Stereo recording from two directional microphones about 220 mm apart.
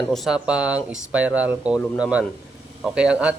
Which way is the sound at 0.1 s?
Centre (ahead or behind).